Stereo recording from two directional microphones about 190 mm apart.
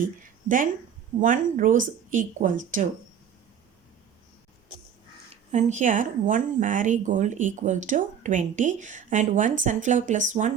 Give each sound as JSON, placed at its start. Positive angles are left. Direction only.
{"t": 0.0, "sound": "speech", "side_deg": -45}
{"t": 5.3, "sound": "speech", "side_deg": -40}